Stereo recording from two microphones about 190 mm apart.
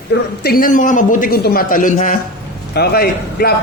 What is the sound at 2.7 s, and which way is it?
Speech, 55° left (ahead or behind).